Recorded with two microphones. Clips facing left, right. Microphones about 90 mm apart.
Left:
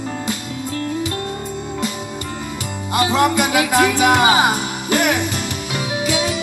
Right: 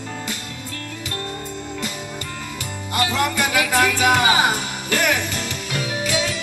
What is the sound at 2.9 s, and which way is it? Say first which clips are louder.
Music: left 5 dB; 20° left (ahead or behind).